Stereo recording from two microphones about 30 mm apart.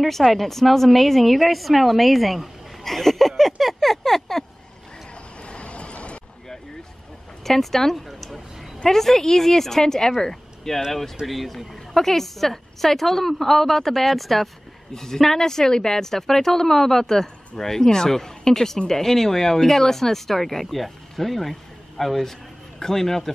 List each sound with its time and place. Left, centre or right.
0.2 s a woman's voice: centre
2.8 s a sound: centre
5.4 s vehicle: left
7.4 s a woman's voice: centre
8.8 s a woman's voice: centre
10.2 s a sound: centre
10.8 s a woman's voice: centre